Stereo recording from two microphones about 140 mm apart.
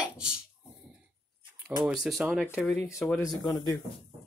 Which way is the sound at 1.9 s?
Centre (ahead or behind).